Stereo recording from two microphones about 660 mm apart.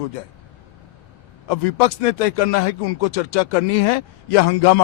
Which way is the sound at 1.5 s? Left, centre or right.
Left.